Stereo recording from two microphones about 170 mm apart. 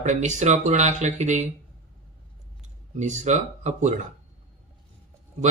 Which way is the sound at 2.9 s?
45° right (ahead or behind).